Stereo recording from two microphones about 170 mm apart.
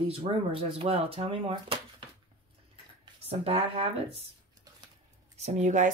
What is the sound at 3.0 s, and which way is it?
Speech, 35° right (ahead or behind).